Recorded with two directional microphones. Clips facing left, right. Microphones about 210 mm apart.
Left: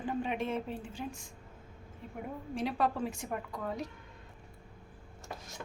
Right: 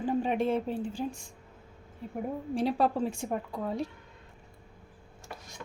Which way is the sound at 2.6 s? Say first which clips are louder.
Right 4 dB; 35° right (ahead or behind).